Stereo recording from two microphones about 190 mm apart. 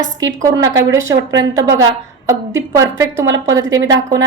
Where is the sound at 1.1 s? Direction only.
75° right (ahead or behind).